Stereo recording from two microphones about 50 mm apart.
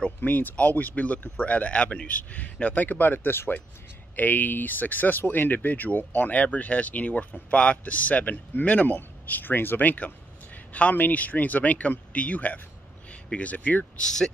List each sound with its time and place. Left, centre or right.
0.2 s speech: left
14.0 s speech: centre